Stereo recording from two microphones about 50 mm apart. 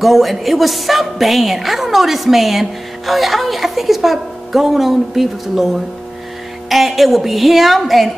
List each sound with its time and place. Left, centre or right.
0.0 s a woman's voice: centre